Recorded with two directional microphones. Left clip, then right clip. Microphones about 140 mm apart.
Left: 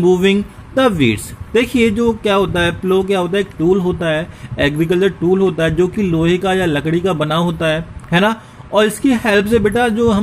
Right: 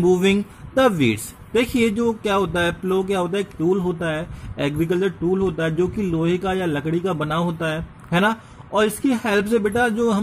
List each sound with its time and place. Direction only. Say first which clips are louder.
0.0 s speech: left 5 dB; 15° right (ahead or behind)